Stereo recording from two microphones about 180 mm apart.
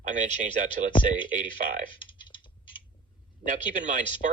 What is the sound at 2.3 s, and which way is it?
Frog, 25° left (ahead or behind).